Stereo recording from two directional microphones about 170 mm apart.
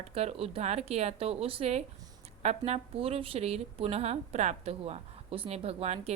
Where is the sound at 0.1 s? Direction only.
35° right (ahead or behind).